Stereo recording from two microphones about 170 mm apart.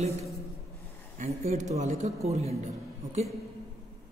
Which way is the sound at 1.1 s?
40° right (ahead or behind).